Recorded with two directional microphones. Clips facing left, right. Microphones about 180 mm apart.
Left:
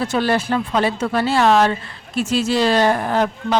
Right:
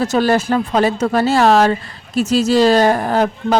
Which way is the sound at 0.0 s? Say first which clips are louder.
Right 4 dB; 40° right (ahead or behind).